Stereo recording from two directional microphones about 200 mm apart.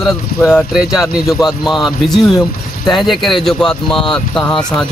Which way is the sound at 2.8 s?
Centre (ahead or behind).